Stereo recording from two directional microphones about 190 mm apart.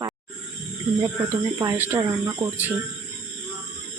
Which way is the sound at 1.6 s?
15° right (ahead or behind).